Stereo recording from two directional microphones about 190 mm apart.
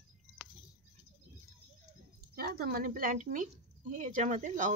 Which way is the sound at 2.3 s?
55° right (ahead or behind).